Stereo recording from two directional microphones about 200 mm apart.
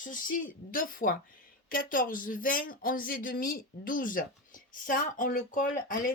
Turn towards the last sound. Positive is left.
turn(degrees=45)  # may be behind; listen again after turning